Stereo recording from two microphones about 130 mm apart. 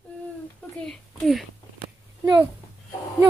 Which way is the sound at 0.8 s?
Centre (ahead or behind).